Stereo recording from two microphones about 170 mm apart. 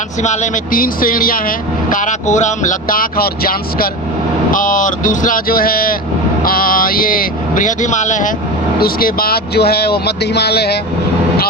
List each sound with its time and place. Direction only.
0.2 s speech: 45° left (ahead or behind)
8.8 s speech: 60° left (ahead or behind)